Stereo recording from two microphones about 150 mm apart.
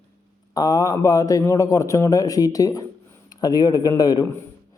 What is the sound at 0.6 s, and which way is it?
A man's voice, 25° left (ahead or behind).